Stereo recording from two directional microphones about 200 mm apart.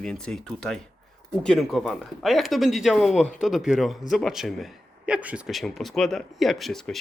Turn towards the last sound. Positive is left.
turn(degrees=0)  # may be behind; listen again after turning